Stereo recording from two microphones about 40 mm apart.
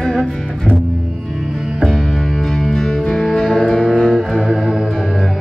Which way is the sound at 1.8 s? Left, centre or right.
Centre.